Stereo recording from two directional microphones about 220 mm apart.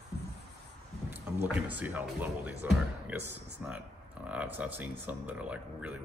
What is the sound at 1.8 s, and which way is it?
Speech, 5° right (ahead or behind).